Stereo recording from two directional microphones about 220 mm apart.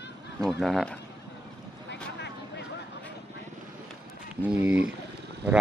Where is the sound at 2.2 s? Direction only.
50° left (ahead or behind).